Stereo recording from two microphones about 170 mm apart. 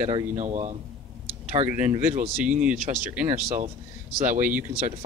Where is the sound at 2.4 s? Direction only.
5° right (ahead or behind).